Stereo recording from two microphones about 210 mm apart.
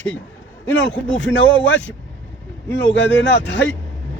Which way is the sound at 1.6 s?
60° left (ahead or behind).